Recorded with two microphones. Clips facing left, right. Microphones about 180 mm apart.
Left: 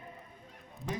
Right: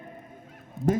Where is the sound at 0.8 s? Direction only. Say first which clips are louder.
Right 16 dB; centre (ahead or behind).